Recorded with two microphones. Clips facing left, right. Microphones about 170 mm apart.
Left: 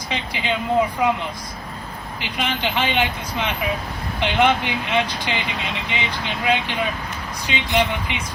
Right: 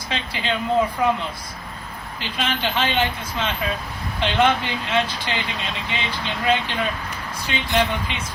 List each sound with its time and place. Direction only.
0.1 s speech: 15° left (ahead or behind)
2.2 s speech: 15° left (ahead or behind)